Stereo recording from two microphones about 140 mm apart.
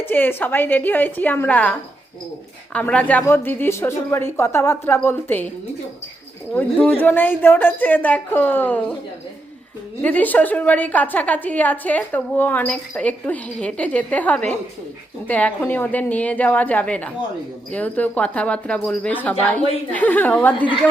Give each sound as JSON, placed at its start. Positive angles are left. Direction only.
{"t": 0.0, "sound": "a woman's voice", "side_deg": 15}
{"t": 2.7, "sound": "a woman's voice", "side_deg": 10}
{"t": 6.5, "sound": "a woman's voice", "side_deg": 10}
{"t": 10.0, "sound": "a woman's voice", "side_deg": 10}